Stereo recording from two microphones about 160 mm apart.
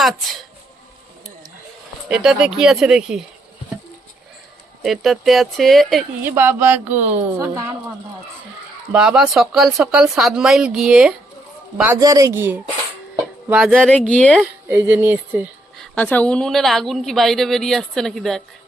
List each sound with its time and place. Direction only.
0.0 s a woman's voice: centre (ahead or behind)
2.0 s a woman's voice: 5° right (ahead or behind)
4.8 s a woman's voice: centre (ahead or behind)
6.2 s a sound: 15° right (ahead or behind)
7.3 s speech: 20° right (ahead or behind)
8.9 s a woman's voice: 5° right (ahead or behind)
11.9 s speech: 20° right (ahead or behind)
13.5 s a sound: 10° right (ahead or behind)
13.7 s a woman's voice: 5° left (ahead or behind)
14.7 s a sound: 15° right (ahead or behind)
15.8 s a woman's voice: 10° left (ahead or behind)